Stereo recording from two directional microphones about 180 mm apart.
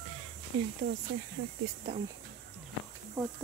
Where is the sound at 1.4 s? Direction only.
80° right.